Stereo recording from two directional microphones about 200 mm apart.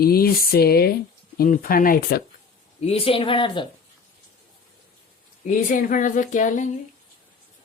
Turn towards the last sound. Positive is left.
turn(degrees=40)  # may be behind; listen again after turning